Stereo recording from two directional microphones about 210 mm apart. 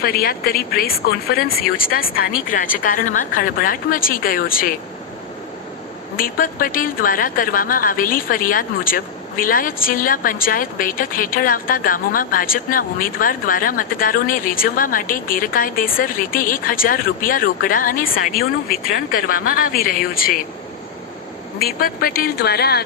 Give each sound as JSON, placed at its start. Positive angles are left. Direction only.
{"t": 0.0, "sound": "a woman's voice", "side_deg": 45}
{"t": 6.1, "sound": "a woman's voice", "side_deg": 40}
{"t": 21.6, "sound": "a woman's voice", "side_deg": 45}